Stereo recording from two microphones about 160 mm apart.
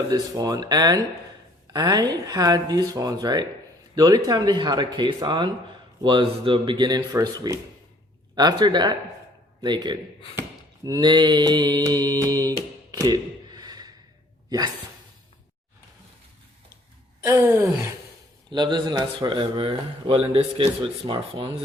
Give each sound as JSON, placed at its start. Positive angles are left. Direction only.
{"t": 0.1, "sound": "a man's voice", "side_deg": -20}
{"t": 13.0, "sound": "a sound", "side_deg": -25}
{"t": 17.2, "sound": "wail", "side_deg": -15}
{"t": 18.5, "sound": "speech", "side_deg": -25}